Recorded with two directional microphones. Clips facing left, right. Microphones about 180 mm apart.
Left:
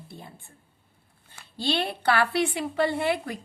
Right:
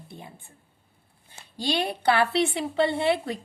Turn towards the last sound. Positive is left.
turn(degrees=-30)  # may be behind; listen again after turning